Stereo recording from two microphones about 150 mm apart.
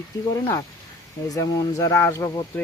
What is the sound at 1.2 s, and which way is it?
Speech, 25° left (ahead or behind).